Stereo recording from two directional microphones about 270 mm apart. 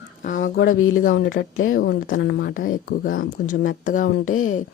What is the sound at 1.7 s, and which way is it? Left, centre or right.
Speech, left.